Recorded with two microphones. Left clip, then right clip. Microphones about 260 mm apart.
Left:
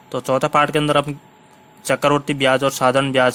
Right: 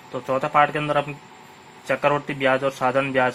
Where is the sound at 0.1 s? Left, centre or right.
Left.